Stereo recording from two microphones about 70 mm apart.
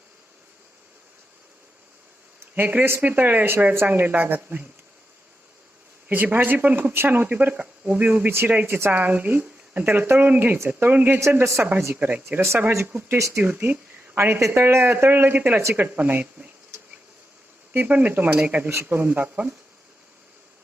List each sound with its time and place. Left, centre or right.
2.4 s speech: right
6.1 s speech: right
8.6 s speech: right
8.9 s speech: right
11.2 s speech: right
11.9 s speech: right
13.1 s speech: right
13.4 s speech: right
17.7 s speech: right
18.7 s speech: right